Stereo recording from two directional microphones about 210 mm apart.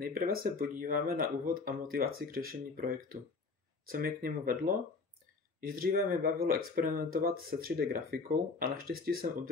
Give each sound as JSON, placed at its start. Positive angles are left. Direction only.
{"t": 0.0, "sound": "speech", "side_deg": -45}